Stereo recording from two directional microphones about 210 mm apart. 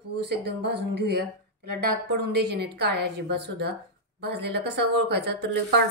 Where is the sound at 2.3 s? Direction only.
50° right (ahead or behind).